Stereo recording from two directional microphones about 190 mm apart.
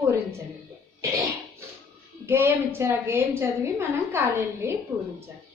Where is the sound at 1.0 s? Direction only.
15° right (ahead or behind).